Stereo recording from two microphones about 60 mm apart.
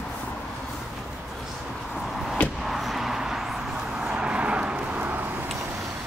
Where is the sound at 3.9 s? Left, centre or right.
Centre.